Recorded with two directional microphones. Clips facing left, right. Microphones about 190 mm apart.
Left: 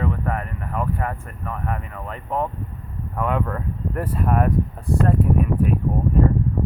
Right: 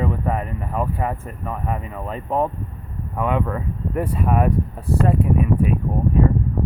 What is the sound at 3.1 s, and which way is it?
Speech, 5° right (ahead or behind).